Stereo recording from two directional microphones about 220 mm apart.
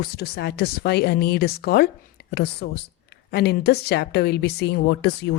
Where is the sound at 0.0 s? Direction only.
45° left (ahead or behind).